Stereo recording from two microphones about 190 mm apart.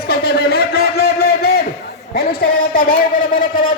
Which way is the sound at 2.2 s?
50° left (ahead or behind).